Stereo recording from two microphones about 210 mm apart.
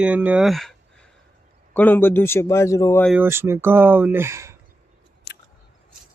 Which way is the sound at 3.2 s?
10° right (ahead or behind).